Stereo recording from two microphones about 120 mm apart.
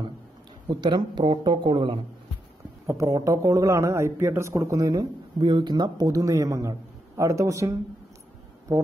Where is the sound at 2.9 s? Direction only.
30° right (ahead or behind).